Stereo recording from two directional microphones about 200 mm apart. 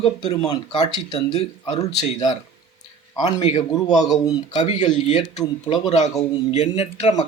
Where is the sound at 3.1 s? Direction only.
20° left (ahead or behind).